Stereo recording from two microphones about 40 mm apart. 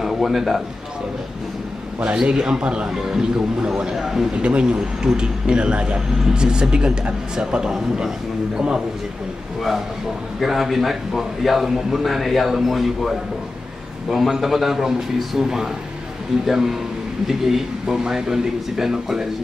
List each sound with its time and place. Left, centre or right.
0.0 s a man's voice: centre
2.0 s a man's voice: right; by 4.3 s centre
4.3 s a man's voice: right
10.4 s a man's voice: centre
14.1 s speech: centre